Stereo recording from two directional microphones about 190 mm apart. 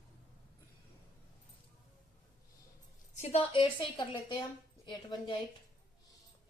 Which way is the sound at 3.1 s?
35° left (ahead or behind).